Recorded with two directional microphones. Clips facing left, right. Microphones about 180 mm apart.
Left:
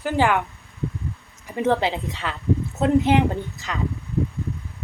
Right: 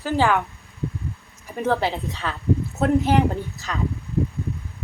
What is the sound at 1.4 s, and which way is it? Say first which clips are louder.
A woman's voice: left 1 dB; 20° left (ahead or behind).